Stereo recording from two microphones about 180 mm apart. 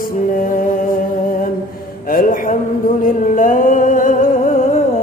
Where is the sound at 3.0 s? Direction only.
45° left (ahead or behind).